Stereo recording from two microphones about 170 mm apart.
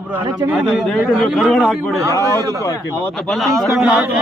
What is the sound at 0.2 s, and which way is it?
Speech, 30° right (ahead or behind).